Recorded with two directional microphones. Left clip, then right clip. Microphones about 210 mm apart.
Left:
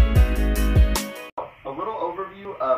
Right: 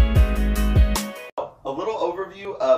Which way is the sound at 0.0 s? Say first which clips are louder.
Even; centre (ahead or behind).